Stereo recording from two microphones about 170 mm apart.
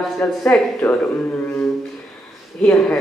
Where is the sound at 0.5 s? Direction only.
10° left (ahead or behind).